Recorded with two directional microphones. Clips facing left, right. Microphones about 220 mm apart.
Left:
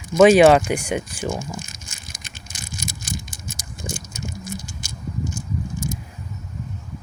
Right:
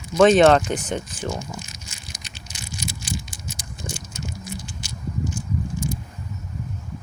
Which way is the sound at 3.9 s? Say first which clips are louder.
Left 2 dB; 45° left (ahead or behind).